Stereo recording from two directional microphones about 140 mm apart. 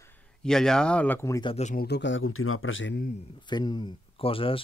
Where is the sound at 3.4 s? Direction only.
30° left (ahead or behind).